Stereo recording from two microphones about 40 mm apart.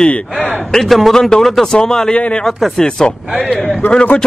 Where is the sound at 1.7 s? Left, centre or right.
Centre.